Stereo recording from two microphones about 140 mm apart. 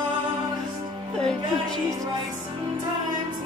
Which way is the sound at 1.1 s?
5° left (ahead or behind).